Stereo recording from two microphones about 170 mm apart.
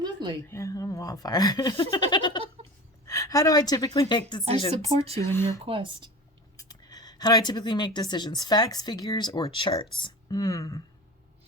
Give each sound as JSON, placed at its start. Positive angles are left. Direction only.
{"t": 0.0, "sound": "a sound", "side_deg": -25}
{"t": 0.4, "sound": "speech", "side_deg": 15}
{"t": 4.8, "sound": "speech", "side_deg": -35}
{"t": 5.2, "sound": "speech", "side_deg": 15}
{"t": 5.6, "sound": "speech", "side_deg": -30}
{"t": 6.6, "sound": "speech", "side_deg": 20}